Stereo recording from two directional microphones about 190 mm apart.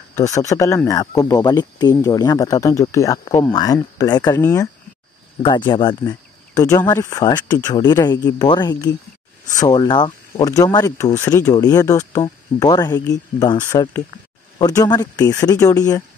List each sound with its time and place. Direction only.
0.1 s speech: 15° left (ahead or behind)
5.7 s speech: 25° left (ahead or behind)
14.6 s speech: 20° left (ahead or behind)